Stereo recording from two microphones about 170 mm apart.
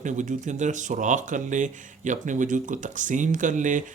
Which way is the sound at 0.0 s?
45° right (ahead or behind).